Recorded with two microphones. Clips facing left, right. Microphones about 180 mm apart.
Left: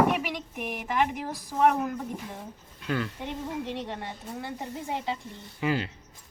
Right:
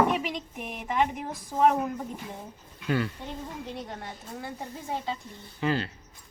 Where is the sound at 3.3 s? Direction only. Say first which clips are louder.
Left 4 dB; 70° left (ahead or behind).